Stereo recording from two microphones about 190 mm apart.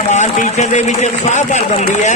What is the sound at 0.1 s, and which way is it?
Speech, 40° left (ahead or behind).